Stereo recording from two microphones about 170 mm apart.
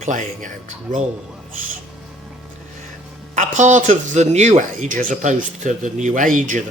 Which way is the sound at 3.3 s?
45° right (ahead or behind).